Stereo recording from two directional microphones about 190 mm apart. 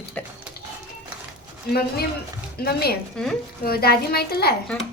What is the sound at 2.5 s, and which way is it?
A woman's voice, 55° left (ahead or behind).